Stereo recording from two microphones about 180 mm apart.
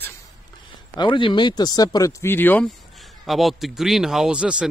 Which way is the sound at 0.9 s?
25° left (ahead or behind).